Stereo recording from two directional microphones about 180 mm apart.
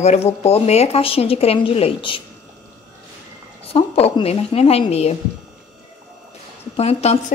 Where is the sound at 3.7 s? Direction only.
35° left (ahead or behind).